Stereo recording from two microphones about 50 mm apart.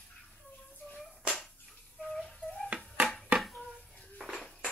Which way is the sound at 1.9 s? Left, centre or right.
Left.